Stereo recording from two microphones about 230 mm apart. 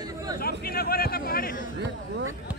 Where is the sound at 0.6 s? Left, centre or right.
Left.